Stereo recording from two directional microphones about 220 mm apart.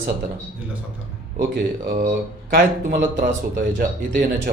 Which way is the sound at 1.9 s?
45° right (ahead or behind).